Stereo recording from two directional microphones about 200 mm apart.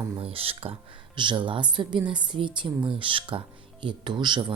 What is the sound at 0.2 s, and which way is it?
Speech, 30° right (ahead or behind).